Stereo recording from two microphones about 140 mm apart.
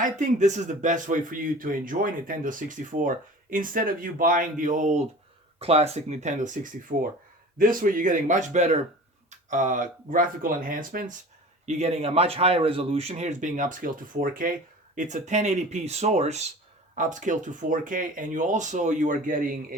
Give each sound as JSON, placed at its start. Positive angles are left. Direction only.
{"t": 0.0, "sound": "speech", "side_deg": -60}
{"t": 5.5, "sound": "speech", "side_deg": -45}
{"t": 7.6, "sound": "speech", "side_deg": -75}
{"t": 9.5, "sound": "speech", "side_deg": -65}
{"t": 11.6, "sound": "speech", "side_deg": -50}
{"t": 16.9, "sound": "speech", "side_deg": -65}